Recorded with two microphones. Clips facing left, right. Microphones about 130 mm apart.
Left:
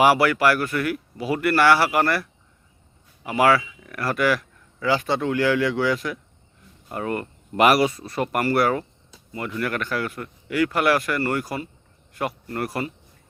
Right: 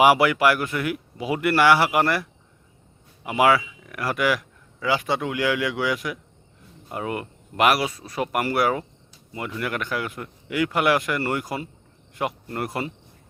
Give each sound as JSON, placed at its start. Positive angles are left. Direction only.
{"t": 0.0, "sound": "speech", "side_deg": -15}
{"t": 3.2, "sound": "speech", "side_deg": -15}